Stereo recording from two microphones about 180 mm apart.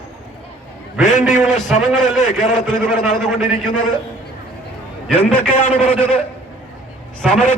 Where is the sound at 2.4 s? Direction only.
45° left (ahead or behind).